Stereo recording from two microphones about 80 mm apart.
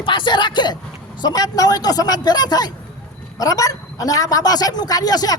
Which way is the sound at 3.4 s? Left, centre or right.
Left.